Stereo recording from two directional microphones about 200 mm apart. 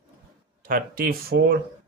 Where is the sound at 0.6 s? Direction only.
45° right (ahead or behind).